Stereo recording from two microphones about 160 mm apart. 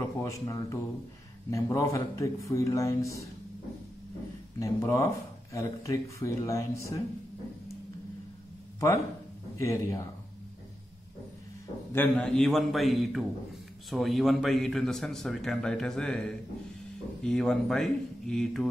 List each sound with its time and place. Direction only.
0.2 s speech: 20° left (ahead or behind)
4.6 s speech: 20° left (ahead or behind)
8.7 s speech: 20° left (ahead or behind)
11.9 s a man's voice: 10° left (ahead or behind)